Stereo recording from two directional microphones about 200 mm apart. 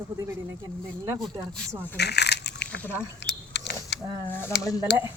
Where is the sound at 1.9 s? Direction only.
55° left (ahead or behind).